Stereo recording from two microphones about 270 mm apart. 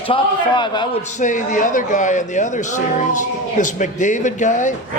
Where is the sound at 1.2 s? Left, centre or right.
Left.